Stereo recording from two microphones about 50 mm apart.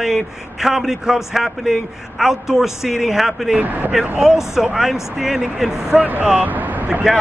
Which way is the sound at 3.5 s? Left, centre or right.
Right.